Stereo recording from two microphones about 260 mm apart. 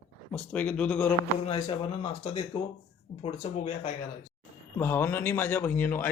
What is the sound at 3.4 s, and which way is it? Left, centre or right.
Speech, left.